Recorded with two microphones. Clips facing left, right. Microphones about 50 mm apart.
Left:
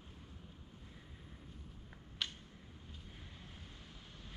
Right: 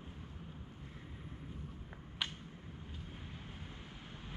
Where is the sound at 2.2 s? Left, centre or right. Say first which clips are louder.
Right 2 dB; centre.